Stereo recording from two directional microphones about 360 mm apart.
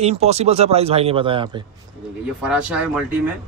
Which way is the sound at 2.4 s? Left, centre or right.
Centre.